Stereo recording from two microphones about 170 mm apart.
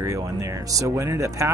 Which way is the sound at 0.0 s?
20° right (ahead or behind).